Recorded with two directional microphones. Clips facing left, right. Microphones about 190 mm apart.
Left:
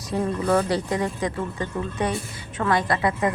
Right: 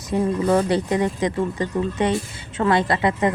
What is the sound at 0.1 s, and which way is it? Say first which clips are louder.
Speech: right 3 dB; 20° right (ahead or behind).